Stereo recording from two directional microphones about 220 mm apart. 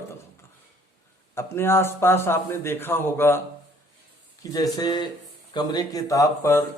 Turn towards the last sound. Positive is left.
turn(degrees=15)  # may be behind; listen again after turning